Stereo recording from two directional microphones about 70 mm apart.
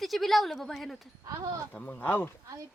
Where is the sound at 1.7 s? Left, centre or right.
Left.